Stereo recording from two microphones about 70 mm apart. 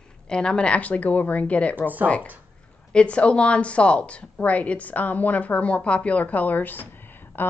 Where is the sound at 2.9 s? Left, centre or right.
Centre.